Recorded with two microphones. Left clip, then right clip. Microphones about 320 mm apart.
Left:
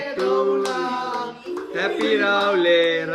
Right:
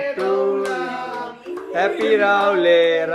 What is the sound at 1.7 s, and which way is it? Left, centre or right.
Speech, centre.